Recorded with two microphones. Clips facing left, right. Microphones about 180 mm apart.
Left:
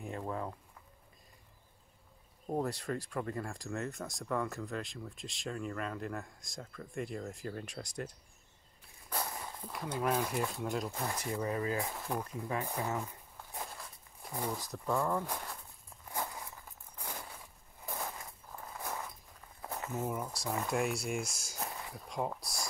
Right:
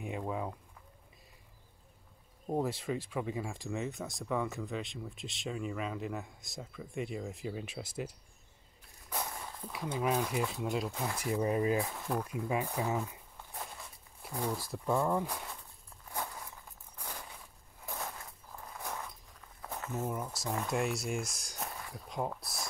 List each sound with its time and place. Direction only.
0.0 s speech: 10° right (ahead or behind)
2.4 s speech: centre (ahead or behind)
11.3 s speech: 20° right (ahead or behind)
12.0 s speech: centre (ahead or behind)
12.3 s speech: 10° right (ahead or behind)
13.0 s a sound: centre (ahead or behind)
14.2 s speech: centre (ahead or behind)
16.2 s a sound: 5° left (ahead or behind)
17.8 s walk: 5° left (ahead or behind)
19.7 s speech: 5° left (ahead or behind)